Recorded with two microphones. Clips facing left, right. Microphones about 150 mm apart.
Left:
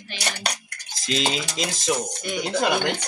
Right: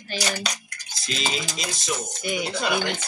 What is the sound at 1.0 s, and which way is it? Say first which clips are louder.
Stir: left 4 dB; 90° left.